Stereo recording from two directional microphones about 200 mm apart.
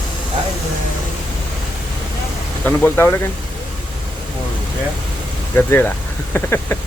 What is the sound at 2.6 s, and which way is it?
Speech, 10° left (ahead or behind).